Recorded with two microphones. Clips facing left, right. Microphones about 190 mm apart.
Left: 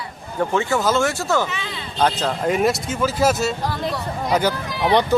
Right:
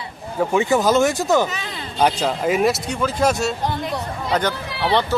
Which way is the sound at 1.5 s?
40° right (ahead or behind).